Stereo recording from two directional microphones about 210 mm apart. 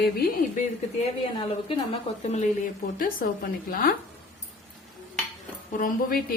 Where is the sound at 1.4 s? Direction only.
25° left (ahead or behind).